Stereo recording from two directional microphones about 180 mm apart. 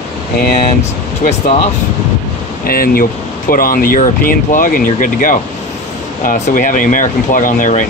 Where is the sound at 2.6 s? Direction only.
55° left (ahead or behind).